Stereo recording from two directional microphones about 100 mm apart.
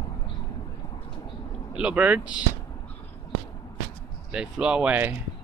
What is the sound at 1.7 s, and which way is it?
Speech, 10° right (ahead or behind).